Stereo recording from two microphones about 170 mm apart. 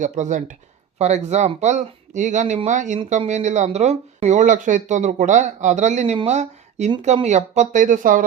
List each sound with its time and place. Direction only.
0.0 s speech: 45° right (ahead or behind)